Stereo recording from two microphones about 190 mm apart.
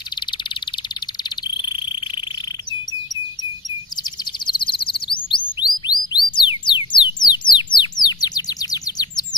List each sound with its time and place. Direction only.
4.5 s chirp: 25° left (ahead or behind)